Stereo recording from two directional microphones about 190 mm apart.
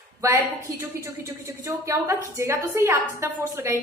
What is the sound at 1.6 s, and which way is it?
A woman's voice, 15° right (ahead or behind).